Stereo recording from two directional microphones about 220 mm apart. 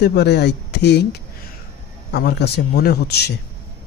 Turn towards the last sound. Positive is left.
turn(degrees=50)  # may be behind; listen again after turning